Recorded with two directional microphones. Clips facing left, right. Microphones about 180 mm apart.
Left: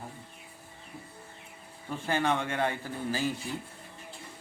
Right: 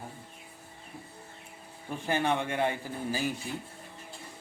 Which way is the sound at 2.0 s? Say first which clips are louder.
Even; 15° right (ahead or behind).